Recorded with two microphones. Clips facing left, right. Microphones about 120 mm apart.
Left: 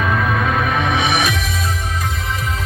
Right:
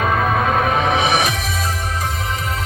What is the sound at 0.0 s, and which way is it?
Music, 40° right (ahead or behind).